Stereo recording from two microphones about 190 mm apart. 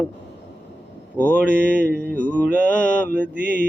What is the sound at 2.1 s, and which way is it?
Mantra, 5° left (ahead or behind).